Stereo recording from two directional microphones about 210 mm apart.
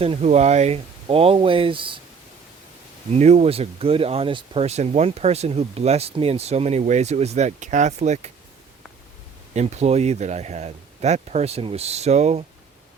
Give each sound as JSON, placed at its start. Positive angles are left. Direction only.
{"t": 0.0, "sound": "speech", "side_deg": -30}
{"t": 3.2, "sound": "speech", "side_deg": -30}
{"t": 9.6, "sound": "speech", "side_deg": -30}